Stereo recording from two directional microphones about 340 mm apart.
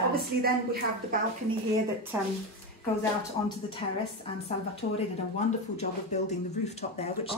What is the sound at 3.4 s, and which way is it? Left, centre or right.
Speech, centre.